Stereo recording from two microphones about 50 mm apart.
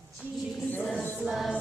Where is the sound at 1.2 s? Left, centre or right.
Right.